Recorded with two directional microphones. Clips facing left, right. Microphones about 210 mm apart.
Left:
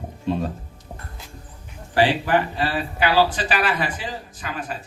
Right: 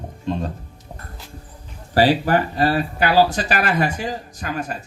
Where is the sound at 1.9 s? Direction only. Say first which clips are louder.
Right 3 dB; 40° right (ahead or behind).